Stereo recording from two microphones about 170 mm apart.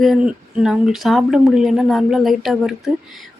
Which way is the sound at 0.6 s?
5° right (ahead or behind).